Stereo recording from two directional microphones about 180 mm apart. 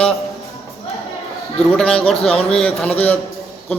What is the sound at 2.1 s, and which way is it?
Speech, 35° left (ahead or behind).